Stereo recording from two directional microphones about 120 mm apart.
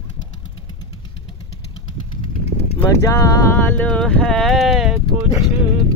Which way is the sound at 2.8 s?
25° left (ahead or behind).